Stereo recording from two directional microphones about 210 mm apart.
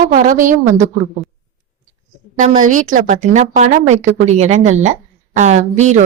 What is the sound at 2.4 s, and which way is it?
A woman's voice, 40° right (ahead or behind).